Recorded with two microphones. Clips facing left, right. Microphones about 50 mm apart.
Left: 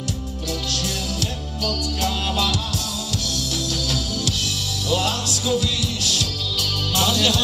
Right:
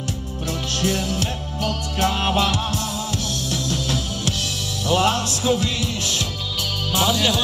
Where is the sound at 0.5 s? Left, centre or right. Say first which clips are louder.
Right 4 dB; right.